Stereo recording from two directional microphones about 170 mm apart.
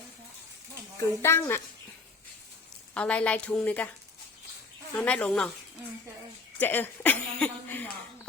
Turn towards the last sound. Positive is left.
turn(degrees=10)  # may be behind; listen again after turning